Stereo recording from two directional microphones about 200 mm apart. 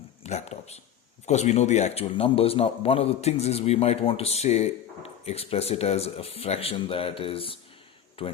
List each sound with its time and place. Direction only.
0.2 s a man's voice: 35° left (ahead or behind)